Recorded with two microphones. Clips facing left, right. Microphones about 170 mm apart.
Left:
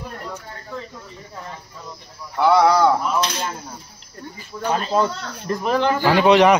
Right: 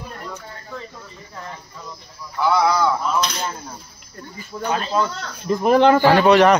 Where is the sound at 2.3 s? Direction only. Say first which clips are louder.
Left 3 dB; 60° left (ahead or behind).